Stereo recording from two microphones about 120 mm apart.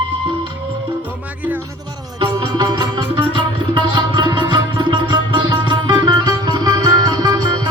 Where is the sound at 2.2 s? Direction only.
40° right (ahead or behind).